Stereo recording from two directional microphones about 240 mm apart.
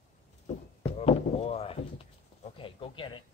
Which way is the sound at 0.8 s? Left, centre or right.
Left.